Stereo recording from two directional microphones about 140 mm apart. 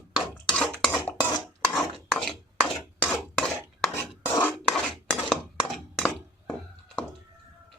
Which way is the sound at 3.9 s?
15° left (ahead or behind).